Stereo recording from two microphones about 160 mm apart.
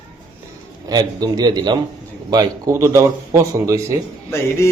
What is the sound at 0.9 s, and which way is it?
A man's voice, 25° right (ahead or behind).